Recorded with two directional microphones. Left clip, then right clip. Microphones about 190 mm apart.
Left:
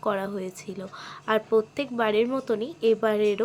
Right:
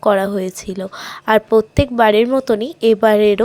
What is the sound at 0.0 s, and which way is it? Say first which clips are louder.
A woman's voice: right 13 dB; 40° right (ahead or behind).